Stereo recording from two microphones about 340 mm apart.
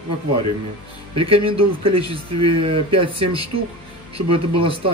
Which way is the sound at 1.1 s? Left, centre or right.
Centre.